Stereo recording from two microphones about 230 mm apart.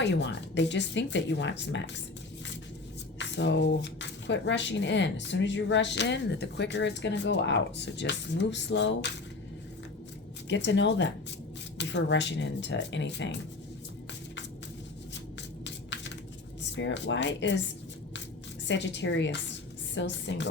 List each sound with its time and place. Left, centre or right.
0.0 s speech: left
3.2 s speech: left
10.5 s speech: left
15.4 s music: left
16.7 s speech: left
18.7 s speech: left